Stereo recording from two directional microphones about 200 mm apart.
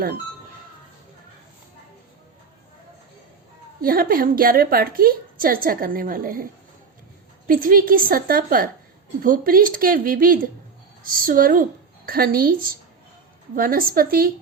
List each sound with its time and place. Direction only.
3.8 s a woman's voice: 45° right (ahead or behind)